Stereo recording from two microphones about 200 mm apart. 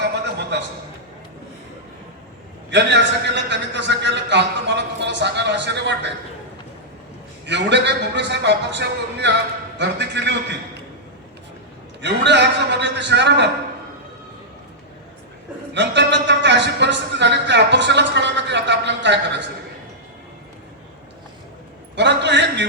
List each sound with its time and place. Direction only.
0.0 s a sound: 60° right (ahead or behind)
2.6 s speech: 60° right (ahead or behind)
7.4 s speech: 60° right (ahead or behind)
12.0 s speech: 60° right (ahead or behind)
15.7 s speech: 60° right (ahead or behind)
21.9 s speech: 60° right (ahead or behind)